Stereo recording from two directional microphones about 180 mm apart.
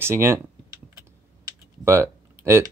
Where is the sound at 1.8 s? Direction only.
15° right (ahead or behind).